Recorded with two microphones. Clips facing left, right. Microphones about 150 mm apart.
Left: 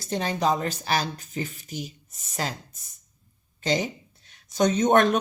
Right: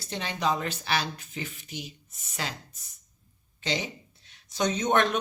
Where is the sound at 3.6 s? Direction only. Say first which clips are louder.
Left 6 dB; 45° left (ahead or behind).